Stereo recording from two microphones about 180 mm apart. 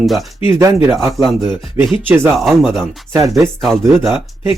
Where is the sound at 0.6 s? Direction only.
15° right (ahead or behind).